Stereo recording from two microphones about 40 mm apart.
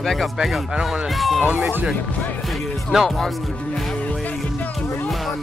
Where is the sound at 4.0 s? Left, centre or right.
Left.